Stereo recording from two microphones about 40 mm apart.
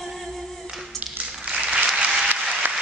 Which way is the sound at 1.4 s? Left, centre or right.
Right.